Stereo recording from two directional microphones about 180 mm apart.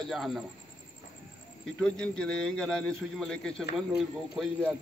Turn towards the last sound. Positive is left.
turn(degrees=0)  # may be behind; listen again after turning